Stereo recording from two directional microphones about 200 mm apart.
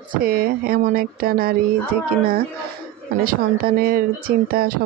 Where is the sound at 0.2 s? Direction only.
50° right (ahead or behind).